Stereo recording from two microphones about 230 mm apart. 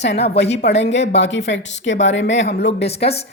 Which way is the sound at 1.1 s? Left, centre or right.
Left.